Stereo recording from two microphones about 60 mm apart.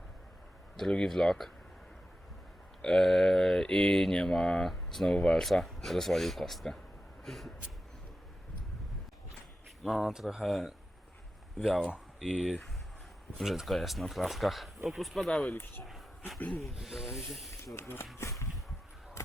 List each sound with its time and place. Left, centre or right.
0.8 s speech: centre
2.8 s speech: centre
9.8 s speech: centre
10.4 s speech: centre
15.3 s speech: centre
16.6 s speech: centre
17.1 s speech: left
18.2 s a sound: left